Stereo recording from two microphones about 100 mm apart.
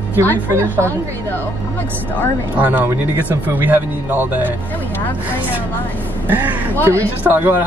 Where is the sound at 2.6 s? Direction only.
15° right (ahead or behind).